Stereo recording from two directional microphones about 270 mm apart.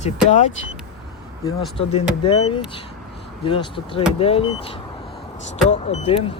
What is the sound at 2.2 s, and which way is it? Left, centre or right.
Speech, centre.